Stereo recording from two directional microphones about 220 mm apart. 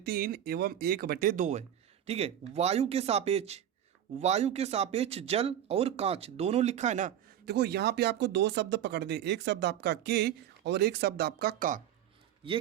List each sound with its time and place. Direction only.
0.0 s speech: 45° right (ahead or behind)
7.4 s speech: 45° right (ahead or behind)